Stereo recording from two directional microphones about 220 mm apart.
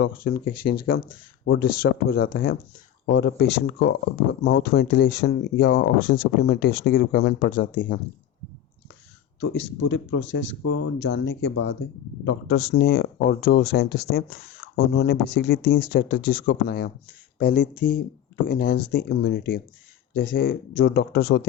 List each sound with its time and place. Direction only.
0.3 s speech: 45° left (ahead or behind)
0.9 s speech: 65° left (ahead or behind)
1.5 s speech: 40° left (ahead or behind)
9.4 s speech: 50° left (ahead or behind)